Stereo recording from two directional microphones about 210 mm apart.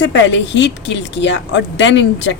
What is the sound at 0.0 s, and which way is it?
A woman's voice, 60° left (ahead or behind).